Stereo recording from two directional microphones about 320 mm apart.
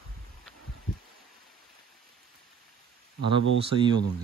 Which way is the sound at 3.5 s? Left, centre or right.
Centre.